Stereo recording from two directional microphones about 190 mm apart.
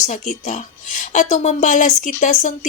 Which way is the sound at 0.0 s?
40° left (ahead or behind).